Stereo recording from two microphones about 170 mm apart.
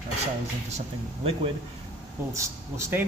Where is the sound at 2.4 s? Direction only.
15° right (ahead or behind).